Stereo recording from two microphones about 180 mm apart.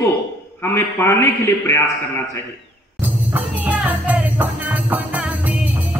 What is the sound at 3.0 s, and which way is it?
Music, 10° right (ahead or behind).